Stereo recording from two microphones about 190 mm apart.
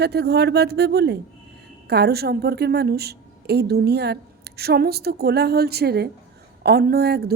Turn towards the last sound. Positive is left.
turn(degrees=-55)  # may be behind; listen again after turning